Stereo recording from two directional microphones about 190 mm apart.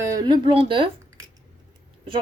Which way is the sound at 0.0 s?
20° right (ahead or behind).